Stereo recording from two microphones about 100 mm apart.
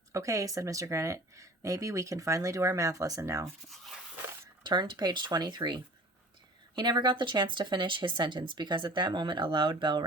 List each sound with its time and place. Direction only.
0.1 s speech: 30° right (ahead or behind)
3.7 s speech: centre (ahead or behind)
4.6 s speech: 50° right (ahead or behind)